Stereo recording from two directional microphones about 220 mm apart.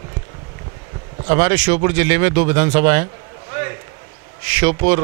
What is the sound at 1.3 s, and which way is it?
Speech, 15° right (ahead or behind).